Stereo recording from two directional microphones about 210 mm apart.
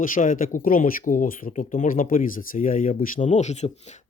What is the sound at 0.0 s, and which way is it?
Speech, 40° left (ahead or behind).